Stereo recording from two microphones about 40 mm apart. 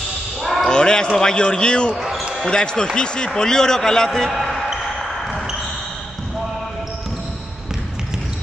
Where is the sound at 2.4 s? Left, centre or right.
Centre.